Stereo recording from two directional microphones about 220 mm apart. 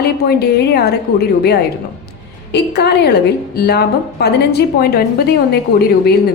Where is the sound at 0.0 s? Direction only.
45° left (ahead or behind).